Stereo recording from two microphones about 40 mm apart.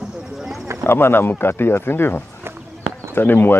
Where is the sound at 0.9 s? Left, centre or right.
Left.